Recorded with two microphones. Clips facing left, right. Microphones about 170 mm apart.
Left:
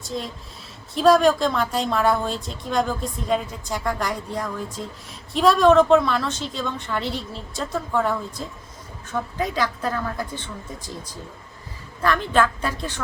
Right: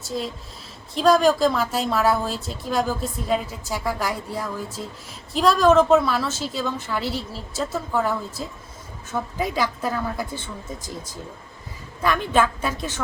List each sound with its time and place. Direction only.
0.0 s a woman's voice: 5° right (ahead or behind)
12.0 s a woman's voice: 10° right (ahead or behind)